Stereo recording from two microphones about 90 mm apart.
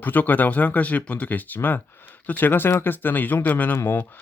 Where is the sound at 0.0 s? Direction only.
20° left (ahead or behind).